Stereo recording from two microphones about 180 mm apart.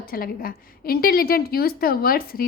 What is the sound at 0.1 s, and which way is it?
A woman's voice, 55° left (ahead or behind).